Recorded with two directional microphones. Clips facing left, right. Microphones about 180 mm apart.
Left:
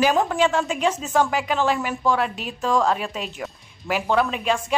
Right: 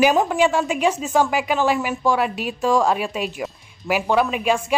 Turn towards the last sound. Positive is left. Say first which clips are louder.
# right 3 dB
turn(degrees=-10)  # may be behind; listen again after turning